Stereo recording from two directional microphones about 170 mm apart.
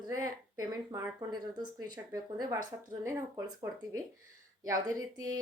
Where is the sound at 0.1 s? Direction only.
20° right (ahead or behind).